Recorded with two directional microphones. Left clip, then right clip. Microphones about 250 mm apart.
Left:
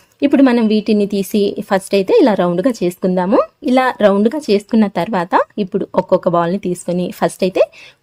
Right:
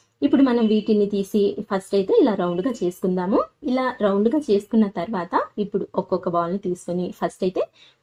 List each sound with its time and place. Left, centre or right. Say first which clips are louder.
0.2 s a woman's voice: left 7 dB; left